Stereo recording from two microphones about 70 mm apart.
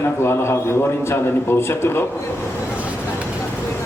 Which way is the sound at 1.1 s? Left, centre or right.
Left.